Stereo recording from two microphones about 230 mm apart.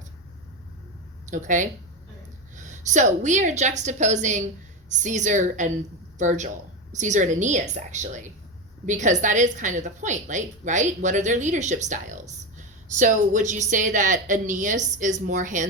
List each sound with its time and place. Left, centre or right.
1.3 s a woman's voice: right